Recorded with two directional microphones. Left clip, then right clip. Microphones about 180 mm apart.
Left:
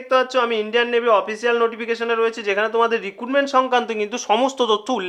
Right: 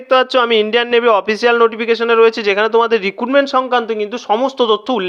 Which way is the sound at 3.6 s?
15° right (ahead or behind).